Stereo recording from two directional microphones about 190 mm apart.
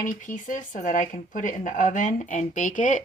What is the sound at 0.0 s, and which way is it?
Speech, 45° left (ahead or behind).